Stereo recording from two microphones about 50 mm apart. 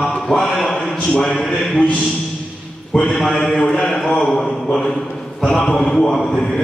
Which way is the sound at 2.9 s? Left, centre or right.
Left.